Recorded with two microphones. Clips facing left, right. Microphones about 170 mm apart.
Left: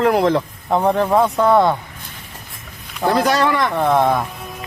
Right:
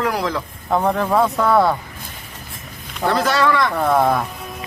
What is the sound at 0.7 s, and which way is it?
Speech, 5° left (ahead or behind).